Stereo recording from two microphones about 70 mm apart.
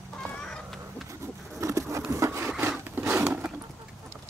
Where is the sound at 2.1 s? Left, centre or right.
Right.